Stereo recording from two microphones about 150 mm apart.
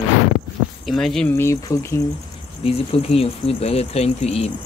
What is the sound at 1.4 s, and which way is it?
Speech, 20° left (ahead or behind).